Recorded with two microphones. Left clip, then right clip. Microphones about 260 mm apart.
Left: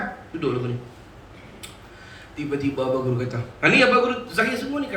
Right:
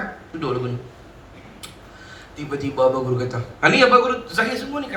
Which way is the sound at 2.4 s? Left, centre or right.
Right.